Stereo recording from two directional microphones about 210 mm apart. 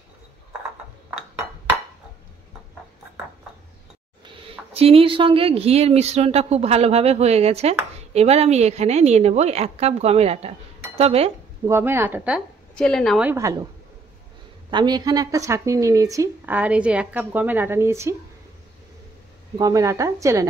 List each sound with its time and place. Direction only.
4.3 s a woman's voice: 25° right (ahead or behind)
11.6 s speech: 10° right (ahead or behind)
12.7 s a woman's voice: 5° left (ahead or behind)
13.3 s speech: 15° right (ahead or behind)
14.7 s speech: 20° right (ahead or behind)
19.6 s speech: 15° right (ahead or behind)